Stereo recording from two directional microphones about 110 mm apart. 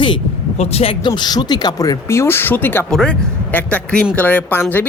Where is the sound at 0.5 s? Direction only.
70° left (ahead or behind).